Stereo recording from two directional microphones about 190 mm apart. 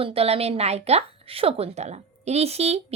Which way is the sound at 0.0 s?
30° right (ahead or behind).